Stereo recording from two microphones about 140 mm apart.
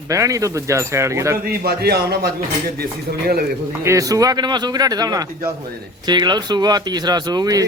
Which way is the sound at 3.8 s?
25° right (ahead or behind).